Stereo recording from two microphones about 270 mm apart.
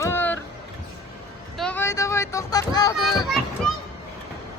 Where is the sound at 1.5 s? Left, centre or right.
Centre.